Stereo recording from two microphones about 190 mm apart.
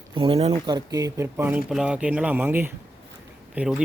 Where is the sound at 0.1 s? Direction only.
30° right (ahead or behind).